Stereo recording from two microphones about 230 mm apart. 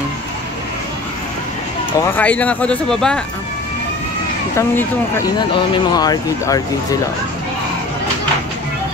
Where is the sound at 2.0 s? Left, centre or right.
Centre.